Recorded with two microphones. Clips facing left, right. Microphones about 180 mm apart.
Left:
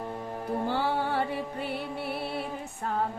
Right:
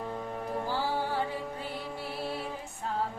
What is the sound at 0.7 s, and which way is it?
Music, 60° left (ahead or behind).